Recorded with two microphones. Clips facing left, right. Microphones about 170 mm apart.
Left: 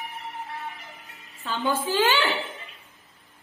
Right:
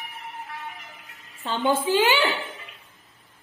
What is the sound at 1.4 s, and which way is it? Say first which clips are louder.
Speech: right 3 dB; 25° right (ahead or behind).